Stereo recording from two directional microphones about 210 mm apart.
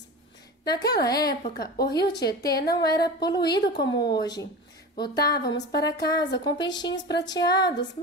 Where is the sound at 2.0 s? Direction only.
50° left (ahead or behind).